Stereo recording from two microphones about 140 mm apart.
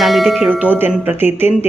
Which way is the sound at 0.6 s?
10° right (ahead or behind).